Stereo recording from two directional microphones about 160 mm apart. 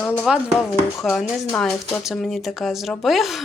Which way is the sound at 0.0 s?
15° left (ahead or behind).